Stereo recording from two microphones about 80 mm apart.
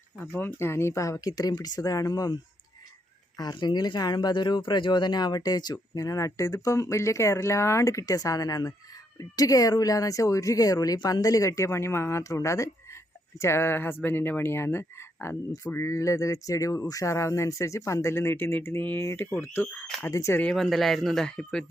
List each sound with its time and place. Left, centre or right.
0.3 s speech: left
3.3 s speech: left
20.6 s speech: centre